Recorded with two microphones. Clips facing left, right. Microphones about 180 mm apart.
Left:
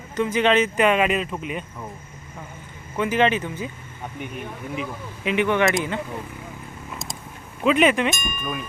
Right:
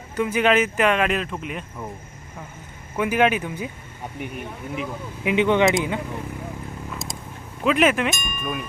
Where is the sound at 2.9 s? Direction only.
10° right (ahead or behind).